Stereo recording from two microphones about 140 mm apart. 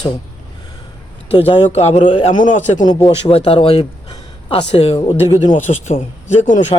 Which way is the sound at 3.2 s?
45° left (ahead or behind).